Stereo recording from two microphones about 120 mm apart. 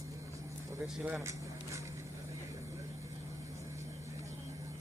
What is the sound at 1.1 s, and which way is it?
Speech, 25° right (ahead or behind).